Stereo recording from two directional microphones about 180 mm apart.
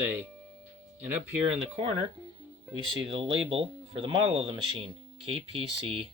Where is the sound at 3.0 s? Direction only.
30° right (ahead or behind).